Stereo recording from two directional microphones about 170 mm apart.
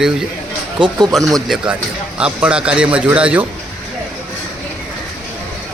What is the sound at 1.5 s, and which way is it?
A man's voice, 5° right (ahead or behind).